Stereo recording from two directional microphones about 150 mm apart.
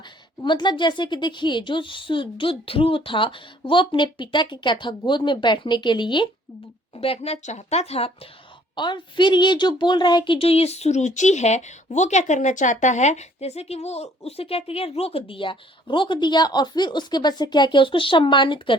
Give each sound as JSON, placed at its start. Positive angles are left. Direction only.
{"t": 0.4, "sound": "a woman's voice", "side_deg": 30}
{"t": 8.7, "sound": "speech", "side_deg": 30}